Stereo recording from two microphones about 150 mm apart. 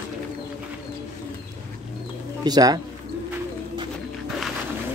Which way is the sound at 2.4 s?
25° right (ahead or behind).